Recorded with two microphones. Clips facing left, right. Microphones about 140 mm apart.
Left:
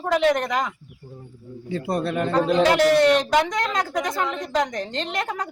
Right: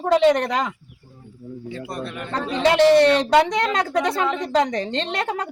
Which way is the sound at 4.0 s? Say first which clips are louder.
Right 4 dB; 70° right (ahead or behind).